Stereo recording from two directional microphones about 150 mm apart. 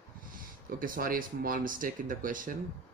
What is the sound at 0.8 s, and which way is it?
Speech, 70° right (ahead or behind).